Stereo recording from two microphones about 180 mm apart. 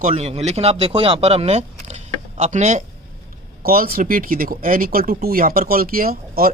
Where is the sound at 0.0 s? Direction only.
40° right (ahead or behind).